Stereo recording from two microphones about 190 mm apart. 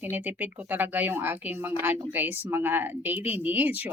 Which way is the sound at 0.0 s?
10° right (ahead or behind).